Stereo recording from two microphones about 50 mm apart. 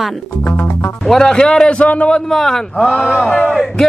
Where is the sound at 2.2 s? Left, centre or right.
Centre.